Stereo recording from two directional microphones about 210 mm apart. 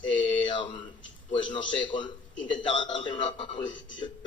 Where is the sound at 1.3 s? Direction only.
20° left (ahead or behind).